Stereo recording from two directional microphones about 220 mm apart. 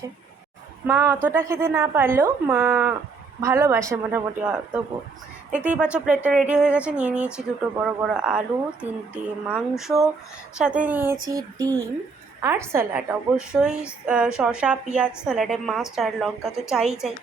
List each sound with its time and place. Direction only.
0.9 s a woman's voice: 10° right (ahead or behind)